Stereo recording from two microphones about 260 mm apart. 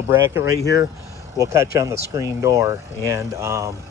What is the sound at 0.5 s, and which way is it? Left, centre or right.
Speech, left.